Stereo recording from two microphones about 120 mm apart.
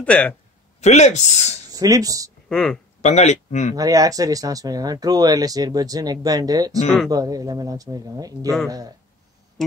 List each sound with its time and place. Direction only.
0.0 s speech: 10° left (ahead or behind)
0.7 s speech: 70° left (ahead or behind)
1.7 s speech: 30° right (ahead or behind)
2.5 s speech: 5° left (ahead or behind)
3.0 s speech: 70° left (ahead or behind)
3.7 s speech: 30° right (ahead or behind)